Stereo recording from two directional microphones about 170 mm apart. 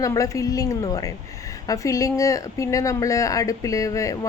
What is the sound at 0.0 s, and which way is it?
Speech, 20° left (ahead or behind).